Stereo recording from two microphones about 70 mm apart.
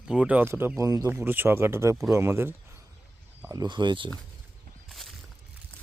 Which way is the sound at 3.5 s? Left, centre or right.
Right.